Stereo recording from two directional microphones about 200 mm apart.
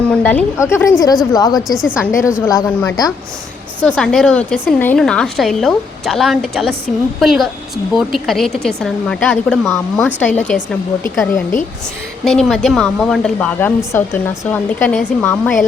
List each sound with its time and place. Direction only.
0.1 s a woman's voice: 5° left (ahead or behind)
1.6 s a woman's voice: centre (ahead or behind)
2.4 s a woman's voice: 15° left (ahead or behind)
12.4 s a woman's voice: centre (ahead or behind)